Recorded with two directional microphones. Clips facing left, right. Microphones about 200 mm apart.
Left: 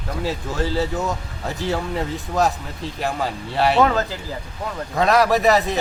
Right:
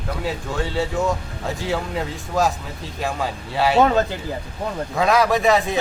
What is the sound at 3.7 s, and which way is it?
Speech, 25° right (ahead or behind).